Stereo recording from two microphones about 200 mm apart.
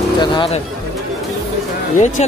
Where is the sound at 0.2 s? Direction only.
25° left (ahead or behind).